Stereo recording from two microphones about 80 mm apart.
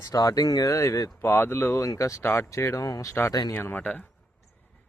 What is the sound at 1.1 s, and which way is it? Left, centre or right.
Speech, left.